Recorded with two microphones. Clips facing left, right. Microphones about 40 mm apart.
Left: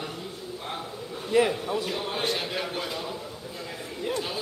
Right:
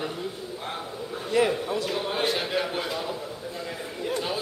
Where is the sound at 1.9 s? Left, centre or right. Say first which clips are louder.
Right 2 dB; centre.